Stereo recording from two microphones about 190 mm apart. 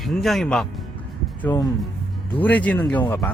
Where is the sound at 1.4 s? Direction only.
15° left (ahead or behind).